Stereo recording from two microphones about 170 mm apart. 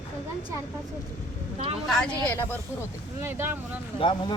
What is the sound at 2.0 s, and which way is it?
Speech, 10° left (ahead or behind).